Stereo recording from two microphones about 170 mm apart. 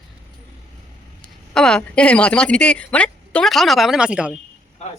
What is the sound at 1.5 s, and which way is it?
A woman's voice, 5° left (ahead or behind).